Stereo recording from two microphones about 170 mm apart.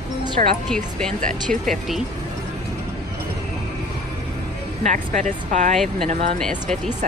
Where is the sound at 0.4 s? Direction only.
50° right (ahead or behind).